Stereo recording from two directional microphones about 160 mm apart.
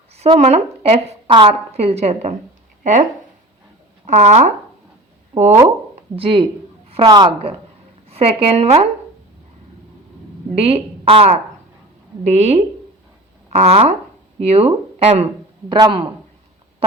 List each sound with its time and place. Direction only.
0.2 s a woman's voice: 40° right (ahead or behind)
6.1 s a woman's voice: 35° right (ahead or behind)
10.5 s a woman's voice: 40° right (ahead or behind)